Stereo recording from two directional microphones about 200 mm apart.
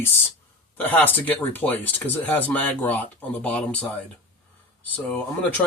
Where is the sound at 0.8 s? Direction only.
10° left (ahead or behind).